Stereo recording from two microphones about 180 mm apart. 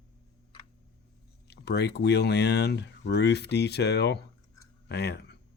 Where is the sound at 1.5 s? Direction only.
65° left (ahead or behind).